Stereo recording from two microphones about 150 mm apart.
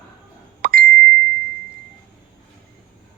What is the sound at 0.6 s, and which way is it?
Plop, 75° right (ahead or behind).